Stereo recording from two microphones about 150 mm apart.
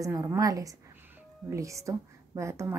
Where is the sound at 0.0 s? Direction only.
20° right (ahead or behind).